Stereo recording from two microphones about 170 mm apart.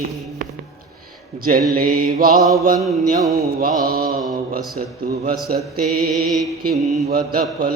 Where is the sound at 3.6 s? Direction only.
60° right (ahead or behind).